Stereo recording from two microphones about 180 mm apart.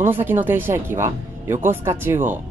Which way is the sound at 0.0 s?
10° right (ahead or behind).